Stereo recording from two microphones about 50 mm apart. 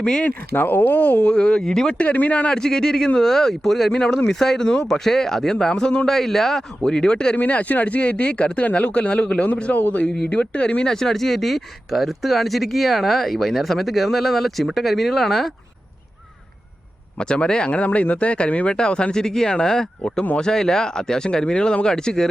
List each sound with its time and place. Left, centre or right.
0.0 s speech: centre
0.3 s speech: left
1.3 s speech: left
2.0 s speech: left
2.5 s speech: centre
7.3 s speech: left; by 15.5 s centre
17.2 s speech: centre
17.8 s speech: left; by 22.3 s centre